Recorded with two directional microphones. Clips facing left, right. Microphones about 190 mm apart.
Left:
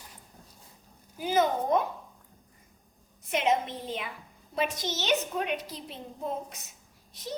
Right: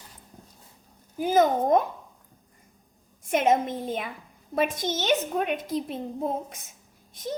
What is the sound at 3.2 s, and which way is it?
A woman's voice, 50° right (ahead or behind).